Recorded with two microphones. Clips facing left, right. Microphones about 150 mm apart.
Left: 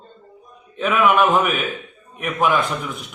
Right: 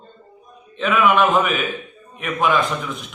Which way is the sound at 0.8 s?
5° left (ahead or behind).